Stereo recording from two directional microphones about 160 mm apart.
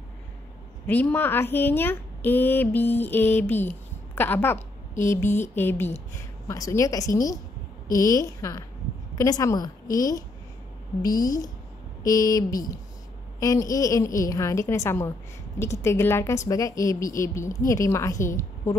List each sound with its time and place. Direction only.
0.8 s a woman's voice: 10° left (ahead or behind)